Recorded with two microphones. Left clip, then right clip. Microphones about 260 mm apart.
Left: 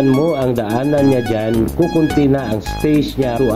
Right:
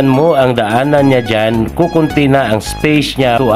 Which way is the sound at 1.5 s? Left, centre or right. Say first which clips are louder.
Right 3 dB; centre.